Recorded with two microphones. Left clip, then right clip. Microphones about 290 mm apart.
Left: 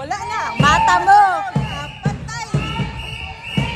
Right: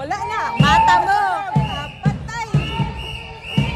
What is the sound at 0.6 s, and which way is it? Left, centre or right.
Music, centre.